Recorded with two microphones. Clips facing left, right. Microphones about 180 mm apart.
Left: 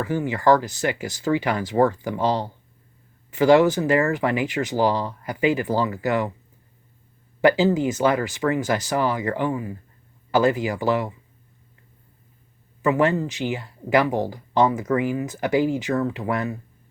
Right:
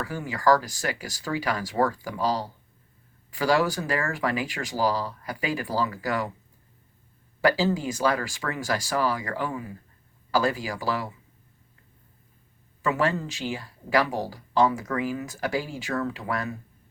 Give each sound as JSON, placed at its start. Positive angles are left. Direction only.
{"t": 0.3, "sound": "speech", "side_deg": 25}
{"t": 7.4, "sound": "speech", "side_deg": 20}
{"t": 12.8, "sound": "speech", "side_deg": 20}